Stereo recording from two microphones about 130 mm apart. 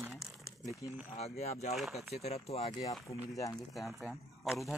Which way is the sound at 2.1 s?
55° left (ahead or behind).